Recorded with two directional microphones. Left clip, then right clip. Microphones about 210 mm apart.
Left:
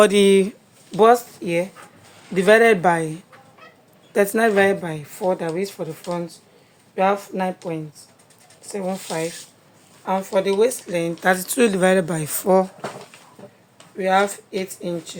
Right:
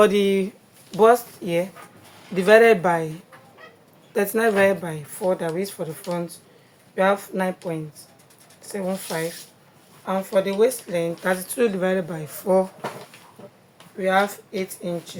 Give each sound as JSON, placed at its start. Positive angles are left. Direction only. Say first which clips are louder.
{"t": 0.0, "sound": "speech", "louder": "left 4 dB", "side_deg": 50}
{"t": 0.9, "sound": "speech", "louder": "left 2 dB", "side_deg": 30}
{"t": 11.2, "sound": "speech", "louder": "left 6 dB", "side_deg": 45}
{"t": 14.0, "sound": "speech", "louder": "left 2 dB", "side_deg": 30}